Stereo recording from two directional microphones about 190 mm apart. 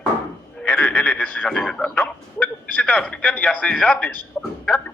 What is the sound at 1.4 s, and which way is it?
A man's voice, 5° left (ahead or behind).